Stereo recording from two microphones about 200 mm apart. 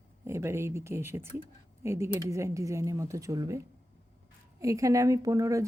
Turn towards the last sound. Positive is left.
turn(degrees=-15)  # may be behind; listen again after turning